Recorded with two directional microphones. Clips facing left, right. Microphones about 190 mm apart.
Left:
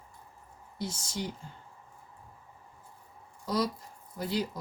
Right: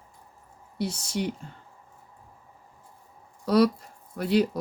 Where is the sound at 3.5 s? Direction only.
70° right (ahead or behind).